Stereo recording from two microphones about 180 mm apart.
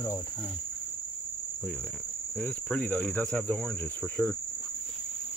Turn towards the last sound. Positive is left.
turn(degrees=5)  # may be behind; listen again after turning